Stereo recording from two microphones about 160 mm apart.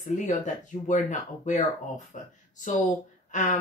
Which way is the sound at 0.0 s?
50° left (ahead or behind).